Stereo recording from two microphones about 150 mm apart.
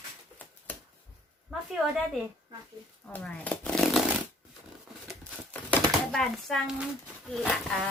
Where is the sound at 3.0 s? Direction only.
5° left (ahead or behind).